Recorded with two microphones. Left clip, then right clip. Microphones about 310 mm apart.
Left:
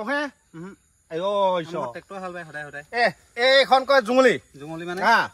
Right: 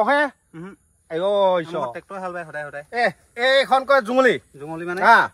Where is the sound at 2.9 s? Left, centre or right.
Centre.